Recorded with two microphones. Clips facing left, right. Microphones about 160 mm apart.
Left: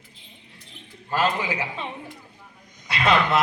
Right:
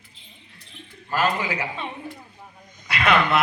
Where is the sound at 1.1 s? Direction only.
25° left (ahead or behind).